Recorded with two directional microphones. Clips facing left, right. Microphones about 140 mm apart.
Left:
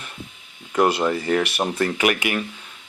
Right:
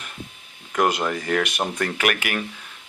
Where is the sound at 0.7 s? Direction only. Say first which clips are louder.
Left 3 dB; 10° left (ahead or behind).